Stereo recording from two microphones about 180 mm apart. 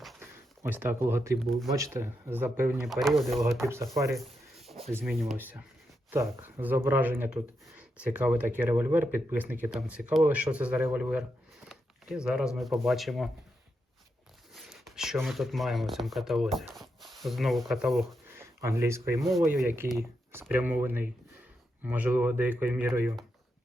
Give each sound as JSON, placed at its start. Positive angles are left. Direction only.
{"t": 0.2, "sound": "speech", "side_deg": -10}
{"t": 1.4, "sound": "speech", "side_deg": 0}
{"t": 1.7, "sound": "speech", "side_deg": -15}
{"t": 2.8, "sound": "speech", "side_deg": 0}
{"t": 3.7, "sound": "speech", "side_deg": -15}
{"t": 4.1, "sound": "a sound", "side_deg": 0}
{"t": 5.4, "sound": "speech", "side_deg": -10}
{"t": 11.7, "sound": "a sound", "side_deg": 0}
{"t": 12.5, "sound": "speech", "side_deg": 0}
{"t": 14.5, "sound": "speech", "side_deg": 0}
{"t": 18.3, "sound": "speech", "side_deg": -15}